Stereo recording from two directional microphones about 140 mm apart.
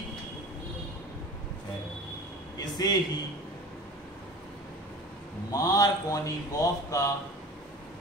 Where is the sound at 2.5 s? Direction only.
30° left (ahead or behind).